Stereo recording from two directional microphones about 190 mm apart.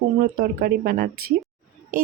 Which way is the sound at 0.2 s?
50° right (ahead or behind).